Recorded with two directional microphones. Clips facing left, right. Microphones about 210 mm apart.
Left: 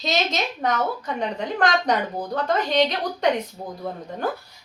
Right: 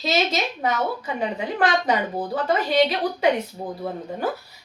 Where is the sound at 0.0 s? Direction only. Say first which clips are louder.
Right 2 dB; 5° right (ahead or behind).